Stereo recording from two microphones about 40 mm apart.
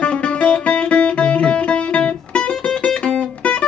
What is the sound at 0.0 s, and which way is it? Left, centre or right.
Music, left.